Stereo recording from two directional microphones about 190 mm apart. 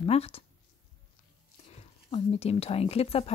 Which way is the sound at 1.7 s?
30° left (ahead or behind).